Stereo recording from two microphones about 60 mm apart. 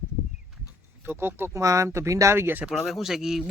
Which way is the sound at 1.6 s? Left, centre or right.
Right.